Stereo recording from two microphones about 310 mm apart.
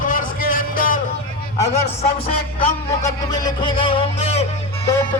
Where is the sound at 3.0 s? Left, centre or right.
Centre.